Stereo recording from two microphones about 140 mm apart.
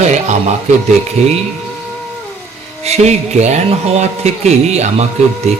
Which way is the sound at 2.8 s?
50° right (ahead or behind).